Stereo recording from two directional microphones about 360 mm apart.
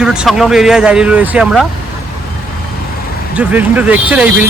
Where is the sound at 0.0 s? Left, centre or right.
Centre.